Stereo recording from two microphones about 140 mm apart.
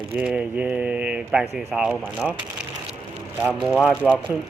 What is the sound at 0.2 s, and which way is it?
Speech, 10° right (ahead or behind).